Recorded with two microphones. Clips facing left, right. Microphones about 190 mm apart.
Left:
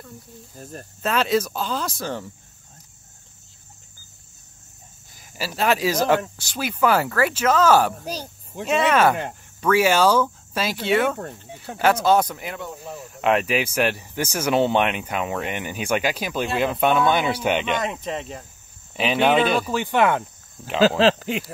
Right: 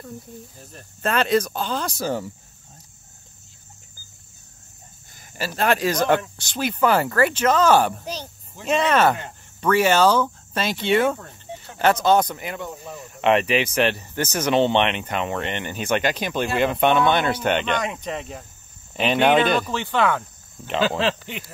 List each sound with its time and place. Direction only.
0.6 s speech: 45° left (ahead or behind)
1.0 s speech: 5° left (ahead or behind)
5.1 s speech: 5° left (ahead or behind); by 20.2 s 20° left (ahead or behind)